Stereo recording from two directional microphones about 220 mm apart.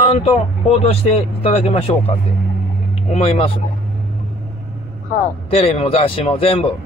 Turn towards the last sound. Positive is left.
turn(degrees=25)  # may be behind; listen again after turning